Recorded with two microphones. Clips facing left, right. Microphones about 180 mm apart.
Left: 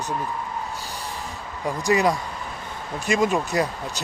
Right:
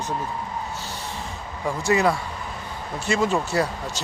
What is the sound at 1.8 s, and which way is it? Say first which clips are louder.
Speech: even; 15° left (ahead or behind).